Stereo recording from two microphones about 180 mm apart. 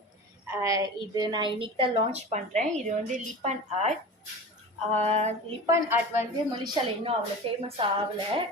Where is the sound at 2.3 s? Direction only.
40° right (ahead or behind).